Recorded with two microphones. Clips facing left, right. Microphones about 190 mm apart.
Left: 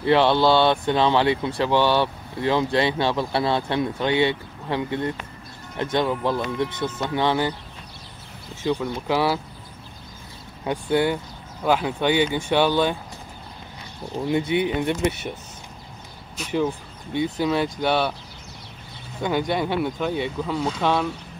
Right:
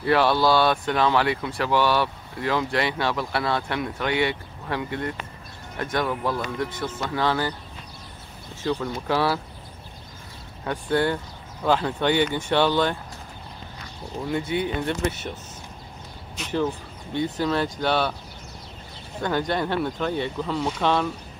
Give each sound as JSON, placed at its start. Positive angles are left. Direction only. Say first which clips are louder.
{"t": 0.0, "sound": "speech", "louder": "left 2 dB", "side_deg": 25}
{"t": 8.6, "sound": "speech", "louder": "left 2 dB", "side_deg": 15}
{"t": 10.6, "sound": "speech", "louder": "left 2 dB", "side_deg": 15}
{"t": 14.3, "sound": "speech", "louder": "left 4 dB", "side_deg": 20}
{"t": 16.3, "sound": "speech", "louder": "left 2 dB", "side_deg": 10}
{"t": 19.2, "sound": "speech", "louder": "left 2 dB", "side_deg": 10}